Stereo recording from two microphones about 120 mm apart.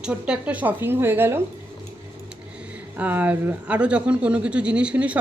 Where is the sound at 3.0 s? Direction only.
15° right (ahead or behind).